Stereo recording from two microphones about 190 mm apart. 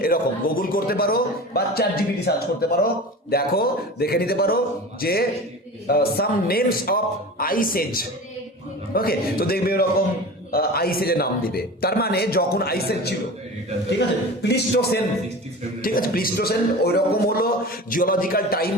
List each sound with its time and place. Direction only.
0.6 s a man's voice: 50° left (ahead or behind)
14.4 s a man's voice: 60° left (ahead or behind)